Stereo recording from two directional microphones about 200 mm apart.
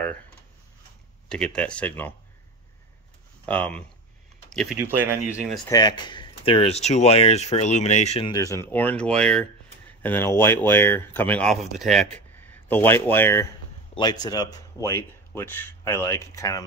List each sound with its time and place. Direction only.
1.3 s speech: 5° left (ahead or behind)
3.4 s speech: 5° left (ahead or behind)
4.7 s speech: 10° right (ahead or behind)
5.7 s speech: 20° left (ahead or behind)
8.3 s speech: 15° left (ahead or behind)